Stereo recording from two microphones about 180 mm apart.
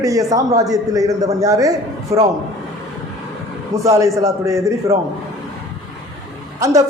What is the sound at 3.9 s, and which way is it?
A man's voice, 15° right (ahead or behind).